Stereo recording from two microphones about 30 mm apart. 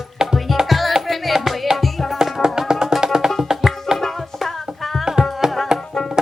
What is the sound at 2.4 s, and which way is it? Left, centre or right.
Music, right.